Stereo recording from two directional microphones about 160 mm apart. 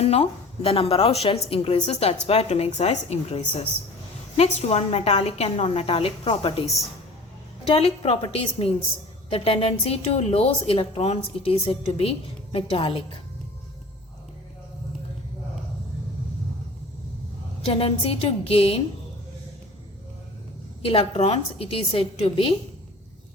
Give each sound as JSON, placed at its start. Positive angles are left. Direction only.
{"t": 0.0, "sound": "a woman's voice", "side_deg": 40}
{"t": 17.7, "sound": "a woman's voice", "side_deg": 35}
{"t": 20.8, "sound": "a woman's voice", "side_deg": 35}